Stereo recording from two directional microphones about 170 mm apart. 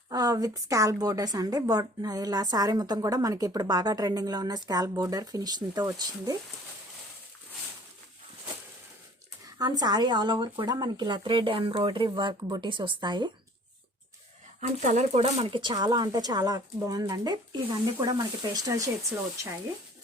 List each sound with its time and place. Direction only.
0.1 s a woman's voice: 20° right (ahead or behind)
9.6 s a woman's voice: 25° right (ahead or behind)
14.8 s a woman's voice: 40° right (ahead or behind); by 19.2 s 20° right (ahead or behind)